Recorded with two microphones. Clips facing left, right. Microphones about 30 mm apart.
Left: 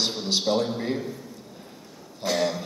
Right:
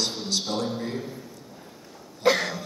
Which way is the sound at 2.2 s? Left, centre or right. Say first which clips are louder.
Right 2 dB; centre.